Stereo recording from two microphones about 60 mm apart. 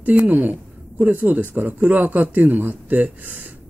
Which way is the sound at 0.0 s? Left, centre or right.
Right.